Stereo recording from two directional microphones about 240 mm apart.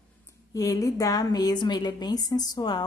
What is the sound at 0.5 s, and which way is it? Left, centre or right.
A woman's voice, centre.